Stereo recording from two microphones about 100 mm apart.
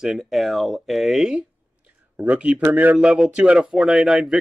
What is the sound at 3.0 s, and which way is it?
Speech, 5° right (ahead or behind).